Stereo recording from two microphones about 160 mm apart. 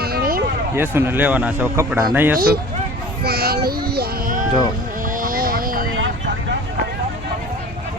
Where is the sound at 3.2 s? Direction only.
75° right (ahead or behind); by 4.5 s 60° right (ahead or behind).